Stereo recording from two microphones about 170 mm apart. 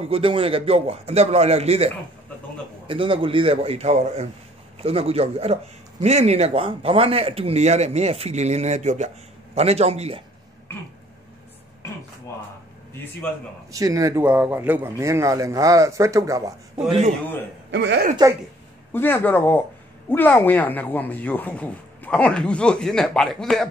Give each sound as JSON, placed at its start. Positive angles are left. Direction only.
{"t": 0.0, "sound": "speech", "side_deg": -35}
{"t": 2.9, "sound": "speech", "side_deg": -30}
{"t": 13.7, "sound": "a man's voice", "side_deg": -20}
{"t": 14.2, "sound": "a man's voice", "side_deg": -10}
{"t": 17.6, "sound": "a woman's voice", "side_deg": -85}
{"t": 18.9, "sound": "speech", "side_deg": 10}